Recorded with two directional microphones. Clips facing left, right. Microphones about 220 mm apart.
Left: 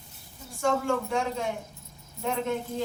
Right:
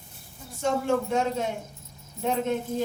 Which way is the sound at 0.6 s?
20° right (ahead or behind).